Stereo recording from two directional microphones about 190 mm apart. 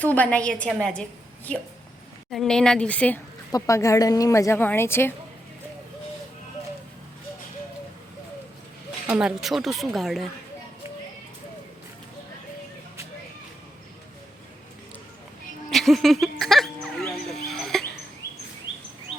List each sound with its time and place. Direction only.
0.0 s speech: 10° left (ahead or behind)
2.3 s a woman's voice: centre (ahead or behind)
9.0 s speech: 5° right (ahead or behind)
15.7 s a sound: centre (ahead or behind)